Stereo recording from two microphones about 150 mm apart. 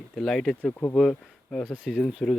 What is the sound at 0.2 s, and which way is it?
Speech, centre (ahead or behind).